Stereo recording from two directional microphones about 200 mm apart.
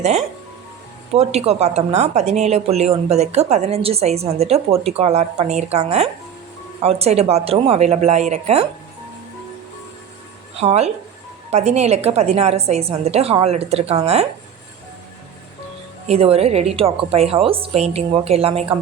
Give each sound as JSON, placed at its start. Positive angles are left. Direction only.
{"t": 0.0, "sound": "a woman's voice", "side_deg": -35}
{"t": 10.6, "sound": "a woman's voice", "side_deg": -30}
{"t": 16.0, "sound": "a woman's voice", "side_deg": -30}